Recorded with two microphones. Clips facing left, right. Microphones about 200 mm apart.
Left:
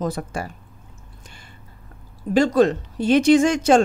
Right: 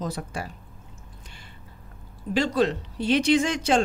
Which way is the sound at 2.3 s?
50° left (ahead or behind).